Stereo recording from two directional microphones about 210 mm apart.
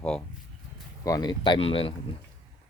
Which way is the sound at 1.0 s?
20° left (ahead or behind).